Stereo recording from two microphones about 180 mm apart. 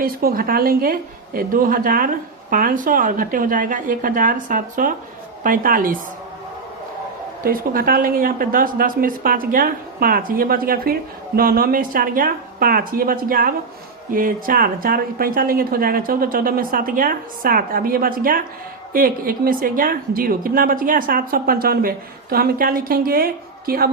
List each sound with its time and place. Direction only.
0.0 s a woman's voice: 55° right (ahead or behind)
7.4 s a woman's voice: 55° right (ahead or behind)